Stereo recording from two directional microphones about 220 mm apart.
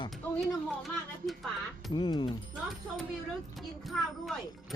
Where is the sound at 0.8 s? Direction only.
Centre (ahead or behind).